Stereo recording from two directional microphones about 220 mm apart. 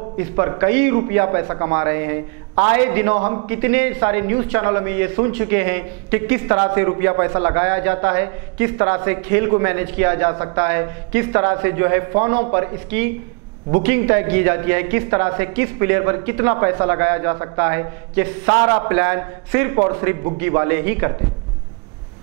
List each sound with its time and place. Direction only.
0.2 s a man's voice: 15° right (ahead or behind)